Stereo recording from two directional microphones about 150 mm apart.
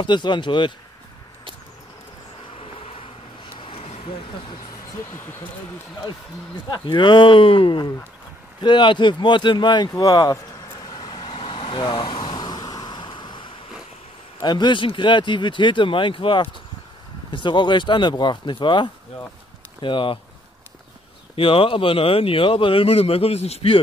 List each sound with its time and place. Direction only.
0.0 s speech: 30° left (ahead or behind)
2.5 s a sound: 40° left (ahead or behind)
3.5 s vehicle: 35° left (ahead or behind)
5.1 s speech: 15° left (ahead or behind)
6.7 s speech: 30° left (ahead or behind)
10.9 s vehicle: 30° left (ahead or behind)
14.4 s speech: 30° left (ahead or behind)
21.4 s speech: 35° left (ahead or behind)